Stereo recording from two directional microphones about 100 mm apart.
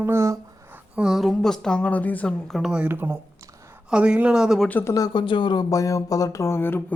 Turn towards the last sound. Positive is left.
turn(degrees=20)  # may be behind; listen again after turning